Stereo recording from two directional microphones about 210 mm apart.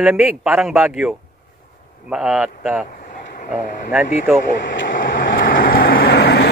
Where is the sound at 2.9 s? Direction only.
40° left (ahead or behind).